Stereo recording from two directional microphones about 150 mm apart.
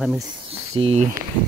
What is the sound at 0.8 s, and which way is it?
Speech, 45° right (ahead or behind).